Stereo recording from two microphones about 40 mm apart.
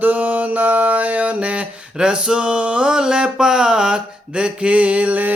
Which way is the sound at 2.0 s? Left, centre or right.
Right.